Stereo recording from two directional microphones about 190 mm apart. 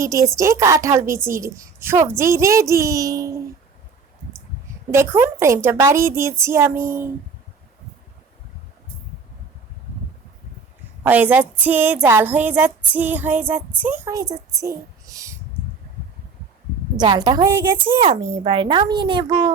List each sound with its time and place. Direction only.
0.0 s music: 15° right (ahead or behind)
4.9 s music: 15° right (ahead or behind)
11.0 s a woman's voice: 10° right (ahead or behind)
11.6 s music: 10° right (ahead or behind)
17.0 s speech: 20° right (ahead or behind)